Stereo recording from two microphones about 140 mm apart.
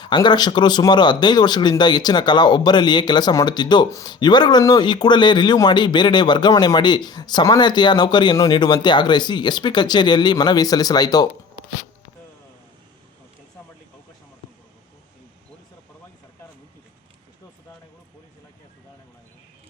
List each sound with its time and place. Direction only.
0.0 s speech: 30° left (ahead or behind)